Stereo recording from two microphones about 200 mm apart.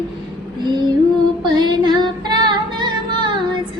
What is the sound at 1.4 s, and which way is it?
Female singing, 20° right (ahead or behind).